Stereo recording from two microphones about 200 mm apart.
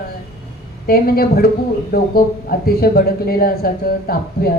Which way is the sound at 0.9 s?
50° left (ahead or behind).